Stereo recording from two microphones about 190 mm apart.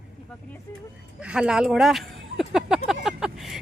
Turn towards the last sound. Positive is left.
turn(degrees=0)  # may be behind; listen again after turning